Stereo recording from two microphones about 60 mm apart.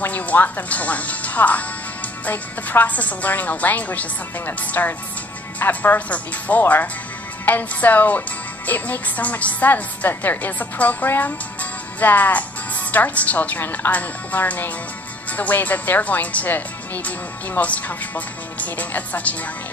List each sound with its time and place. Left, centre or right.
0.0 s a woman's voice: left